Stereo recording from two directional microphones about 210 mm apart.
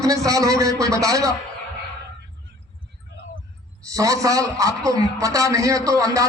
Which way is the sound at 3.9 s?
15° right (ahead or behind).